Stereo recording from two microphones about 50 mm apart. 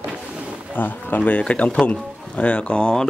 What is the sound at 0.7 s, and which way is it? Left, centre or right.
Speech, left.